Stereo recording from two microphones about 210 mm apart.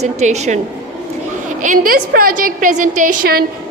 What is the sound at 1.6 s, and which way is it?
A woman's voice, 40° right (ahead or behind).